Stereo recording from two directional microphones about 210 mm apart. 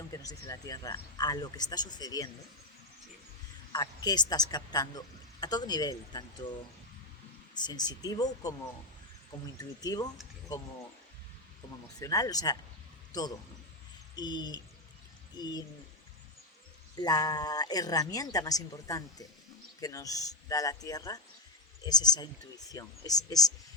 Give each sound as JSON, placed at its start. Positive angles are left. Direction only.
{"t": 0.1, "sound": "speech", "side_deg": 15}
{"t": 3.7, "sound": "speech", "side_deg": 20}
{"t": 7.6, "sound": "speech", "side_deg": 20}
{"t": 9.6, "sound": "speech", "side_deg": 20}
{"t": 11.9, "sound": "speech", "side_deg": 15}
{"t": 17.0, "sound": "speech", "side_deg": 20}